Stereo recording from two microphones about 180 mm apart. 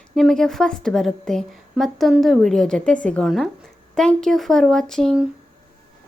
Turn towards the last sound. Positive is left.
turn(degrees=0)  # may be behind; listen again after turning